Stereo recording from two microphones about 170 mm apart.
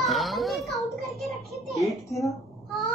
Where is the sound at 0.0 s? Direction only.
Centre (ahead or behind).